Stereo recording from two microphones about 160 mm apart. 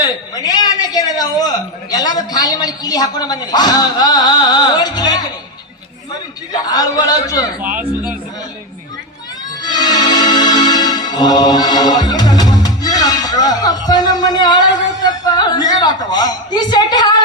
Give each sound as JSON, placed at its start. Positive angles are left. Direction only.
{"t": 0.0, "sound": "a man's voice", "side_deg": 25}
{"t": 6.5, "sound": "a woman's voice", "side_deg": 25}
{"t": 7.6, "sound": "speech", "side_deg": -10}
{"t": 9.6, "sound": "music", "side_deg": 25}
{"t": 15.0, "sound": "a woman's voice", "side_deg": 25}